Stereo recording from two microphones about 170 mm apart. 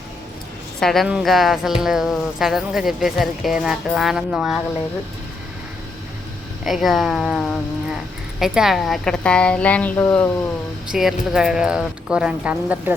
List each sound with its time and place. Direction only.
0.8 s speech: centre (ahead or behind)
6.7 s a woman's voice: centre (ahead or behind)
10.9 s speech: centre (ahead or behind)